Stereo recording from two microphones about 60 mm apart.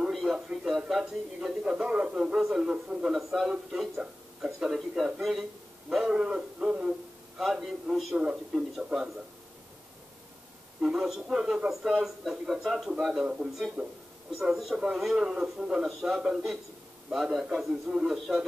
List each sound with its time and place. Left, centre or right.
0.1 s a man's voice: centre
10.8 s a man's voice: centre
13.2 s a man's voice: centre
14.3 s a man's voice: centre